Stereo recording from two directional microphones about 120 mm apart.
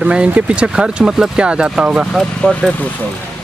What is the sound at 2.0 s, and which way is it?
Speech, 10° left (ahead or behind).